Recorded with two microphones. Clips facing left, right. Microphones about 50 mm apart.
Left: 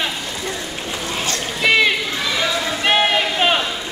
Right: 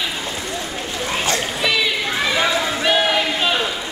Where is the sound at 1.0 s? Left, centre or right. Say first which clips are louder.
Right 4 dB; centre.